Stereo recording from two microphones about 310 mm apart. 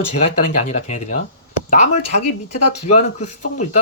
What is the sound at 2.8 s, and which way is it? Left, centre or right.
Speech, left.